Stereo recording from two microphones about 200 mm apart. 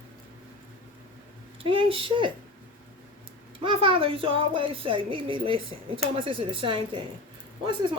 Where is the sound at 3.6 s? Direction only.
25° right (ahead or behind).